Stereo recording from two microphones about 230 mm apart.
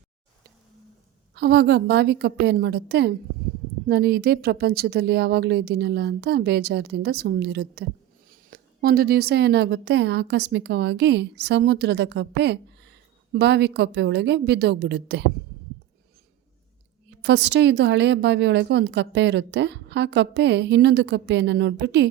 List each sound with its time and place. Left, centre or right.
1.4 s a woman's voice: right
17.2 s a woman's voice: right